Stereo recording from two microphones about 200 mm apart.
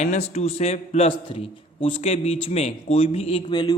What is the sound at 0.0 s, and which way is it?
A man's voice, 35° left (ahead or behind).